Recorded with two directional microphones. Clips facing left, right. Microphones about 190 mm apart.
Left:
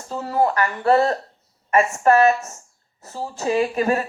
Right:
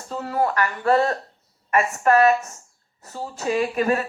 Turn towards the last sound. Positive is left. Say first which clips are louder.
# left 2 dB
turn(degrees=30)  # may be behind; listen again after turning